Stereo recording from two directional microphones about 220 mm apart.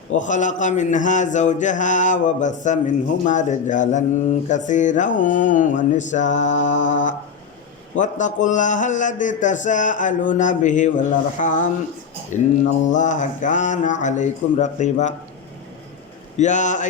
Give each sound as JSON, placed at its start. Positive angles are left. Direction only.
{"t": 0.1, "sound": "a man's voice", "side_deg": 35}
{"t": 16.4, "sound": "a man's voice", "side_deg": 35}